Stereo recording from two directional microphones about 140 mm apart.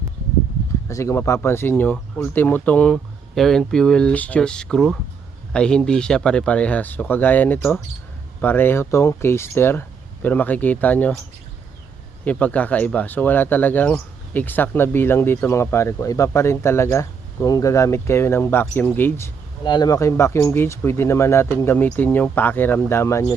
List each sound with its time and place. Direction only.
0.9 s speech: 20° left (ahead or behind)
12.2 s speech: 10° left (ahead or behind)
19.6 s speech: 30° left (ahead or behind)